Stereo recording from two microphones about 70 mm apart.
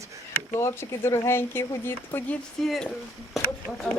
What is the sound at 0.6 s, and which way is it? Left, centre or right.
Speech, left.